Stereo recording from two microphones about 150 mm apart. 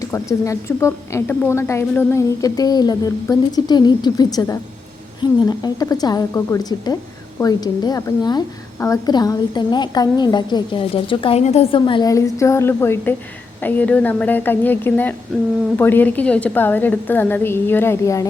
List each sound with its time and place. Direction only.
0.1 s a woman's voice: 20° left (ahead or behind)